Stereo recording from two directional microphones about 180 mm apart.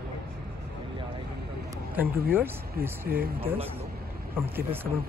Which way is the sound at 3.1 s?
60° right (ahead or behind).